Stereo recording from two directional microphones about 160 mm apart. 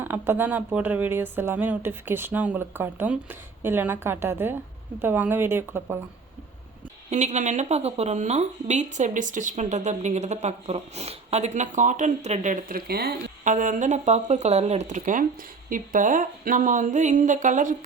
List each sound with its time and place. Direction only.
0.0 s speech: 15° right (ahead or behind)
7.1 s speech: 45° right (ahead or behind); by 13.1 s 75° right (ahead or behind)
13.4 s speech: 50° right (ahead or behind)